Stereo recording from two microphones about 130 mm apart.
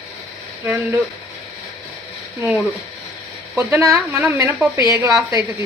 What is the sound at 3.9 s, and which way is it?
Speech, 10° right (ahead or behind).